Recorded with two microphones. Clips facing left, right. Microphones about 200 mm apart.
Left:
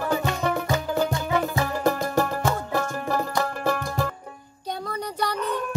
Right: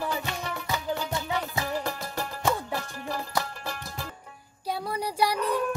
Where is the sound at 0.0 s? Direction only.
55° left (ahead or behind).